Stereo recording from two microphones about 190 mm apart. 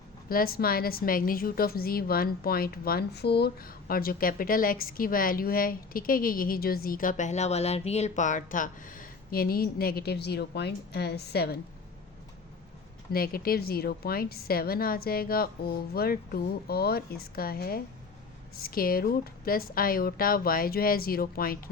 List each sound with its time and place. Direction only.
0.3 s a woman's voice: 50° left (ahead or behind)
13.1 s a woman's voice: 50° left (ahead or behind)